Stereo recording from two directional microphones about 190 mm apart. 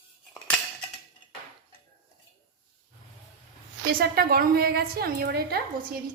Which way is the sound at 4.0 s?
50° right (ahead or behind).